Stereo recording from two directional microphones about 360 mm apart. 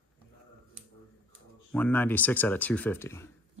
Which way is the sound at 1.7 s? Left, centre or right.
Centre.